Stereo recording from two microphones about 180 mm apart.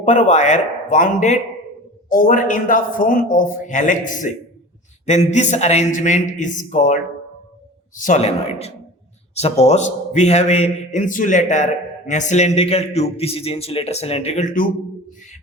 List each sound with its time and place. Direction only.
0.0 s a man's voice: 40° left (ahead or behind)